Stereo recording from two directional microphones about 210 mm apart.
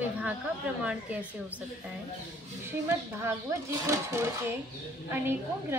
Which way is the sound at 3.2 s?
15° right (ahead or behind).